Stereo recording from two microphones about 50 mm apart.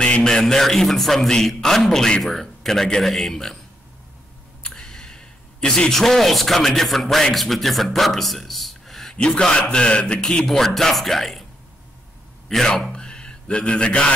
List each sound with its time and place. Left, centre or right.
0.0 s a man's voice: centre
4.6 s a man's voice: centre
9.1 s a man's voice: centre
10.4 s speech: centre
12.4 s a man's voice: centre